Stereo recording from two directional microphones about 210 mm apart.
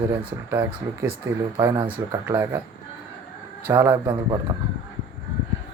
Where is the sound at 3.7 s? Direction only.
15° right (ahead or behind).